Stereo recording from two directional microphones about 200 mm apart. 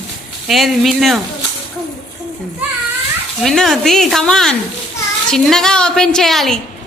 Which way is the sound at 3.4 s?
Centre (ahead or behind).